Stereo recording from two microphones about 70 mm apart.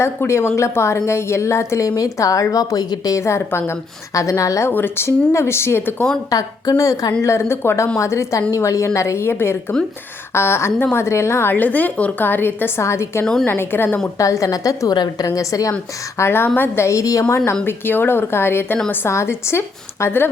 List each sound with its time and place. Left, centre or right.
0.0 s a woman's voice: left
3.2 s a woman's voice: left
4.7 s a woman's voice: left
6.3 s a woman's voice: left
7.2 s a woman's voice: left
14.2 s a woman's voice: left
14.9 s a woman's voice: left
15.3 s a woman's voice: left
16.1 s a woman's voice: left
17.2 s a woman's voice: left
17.7 s a woman's voice: left